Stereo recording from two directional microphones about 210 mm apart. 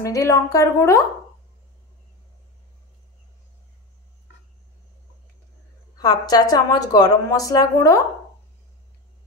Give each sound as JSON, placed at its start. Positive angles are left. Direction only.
{"t": 0.0, "sound": "a woman's voice", "side_deg": 15}
{"t": 5.9, "sound": "a woman's voice", "side_deg": 20}